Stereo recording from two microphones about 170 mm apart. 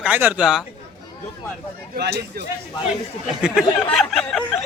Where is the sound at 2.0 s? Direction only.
70° right (ahead or behind).